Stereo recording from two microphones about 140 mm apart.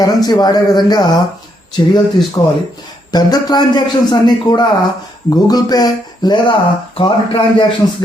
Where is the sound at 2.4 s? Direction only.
25° left (ahead or behind).